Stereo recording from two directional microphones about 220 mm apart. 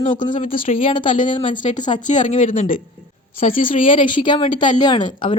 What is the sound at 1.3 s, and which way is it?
Speech, 20° left (ahead or behind).